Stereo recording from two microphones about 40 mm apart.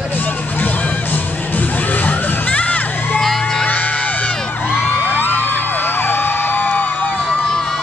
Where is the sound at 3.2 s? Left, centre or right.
Centre.